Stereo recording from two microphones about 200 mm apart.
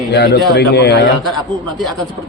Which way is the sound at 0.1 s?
55° left (ahead or behind).